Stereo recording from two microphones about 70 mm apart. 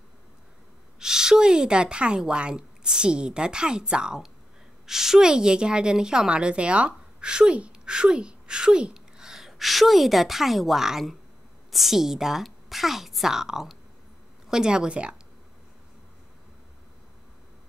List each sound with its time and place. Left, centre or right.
0.9 s a woman's voice: centre